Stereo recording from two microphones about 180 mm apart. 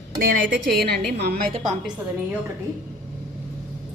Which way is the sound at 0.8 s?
60° right (ahead or behind).